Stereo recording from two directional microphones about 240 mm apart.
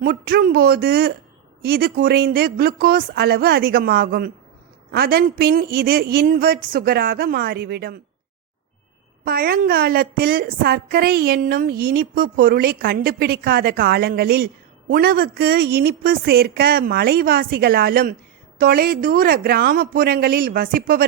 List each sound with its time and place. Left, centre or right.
0.0 s a woman's voice: right
9.2 s a woman's voice: right